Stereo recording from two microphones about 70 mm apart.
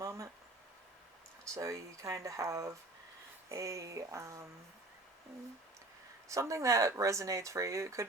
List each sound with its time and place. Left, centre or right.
0.0 s a sound: right
1.5 s speech: right
6.2 s speech: right